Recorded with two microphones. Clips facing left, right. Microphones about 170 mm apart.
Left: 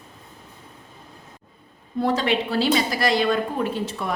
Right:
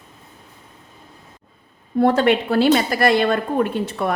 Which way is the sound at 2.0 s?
55° right (ahead or behind).